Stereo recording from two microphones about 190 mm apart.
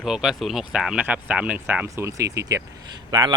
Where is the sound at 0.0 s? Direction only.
Centre (ahead or behind).